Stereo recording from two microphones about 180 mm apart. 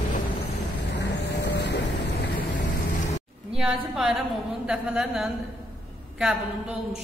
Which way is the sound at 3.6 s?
5° right (ahead or behind).